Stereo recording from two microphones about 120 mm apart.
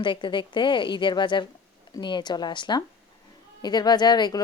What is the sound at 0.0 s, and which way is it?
Speech, 40° left (ahead or behind).